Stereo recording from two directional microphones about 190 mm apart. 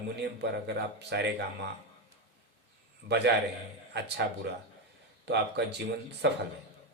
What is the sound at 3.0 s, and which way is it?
Speech, 60° right (ahead or behind).